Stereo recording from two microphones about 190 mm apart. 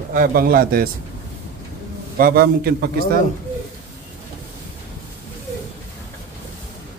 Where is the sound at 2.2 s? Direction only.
50° right (ahead or behind).